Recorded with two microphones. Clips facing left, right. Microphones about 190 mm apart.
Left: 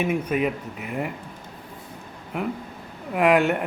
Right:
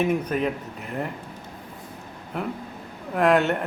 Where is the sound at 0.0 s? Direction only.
5° left (ahead or behind).